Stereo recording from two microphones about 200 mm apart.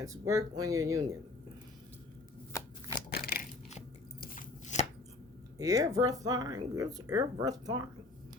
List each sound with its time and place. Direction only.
0.0 s speech: 15° right (ahead or behind)
2.5 s shuffling cards: 15° left (ahead or behind)
3.1 s a sound: 50° left (ahead or behind)
5.5 s speech: 15° right (ahead or behind)